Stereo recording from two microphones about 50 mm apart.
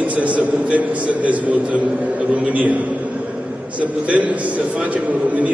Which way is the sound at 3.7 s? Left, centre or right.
Right.